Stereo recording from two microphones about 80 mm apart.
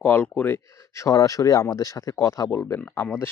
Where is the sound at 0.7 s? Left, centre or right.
Left.